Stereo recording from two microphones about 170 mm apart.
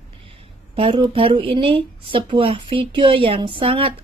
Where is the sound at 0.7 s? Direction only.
35° right (ahead or behind).